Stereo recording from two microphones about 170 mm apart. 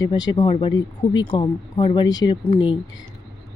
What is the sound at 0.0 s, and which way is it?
Speech, 25° left (ahead or behind).